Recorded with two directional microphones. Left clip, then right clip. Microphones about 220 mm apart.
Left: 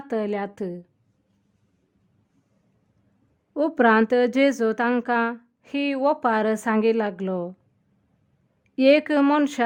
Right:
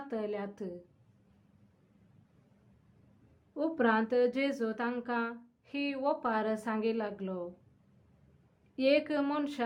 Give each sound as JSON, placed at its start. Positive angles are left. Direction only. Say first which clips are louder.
{"t": 0.1, "sound": "speech", "louder": "left 11 dB", "side_deg": 45}
{"t": 3.5, "sound": "speech", "louder": "left 11 dB", "side_deg": 45}
{"t": 8.7, "sound": "speech", "louder": "left 11 dB", "side_deg": 45}